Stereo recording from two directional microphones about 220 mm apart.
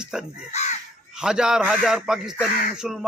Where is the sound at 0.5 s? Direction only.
30° left (ahead or behind).